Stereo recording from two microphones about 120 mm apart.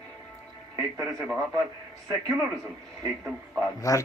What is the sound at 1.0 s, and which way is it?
Speech, centre (ahead or behind).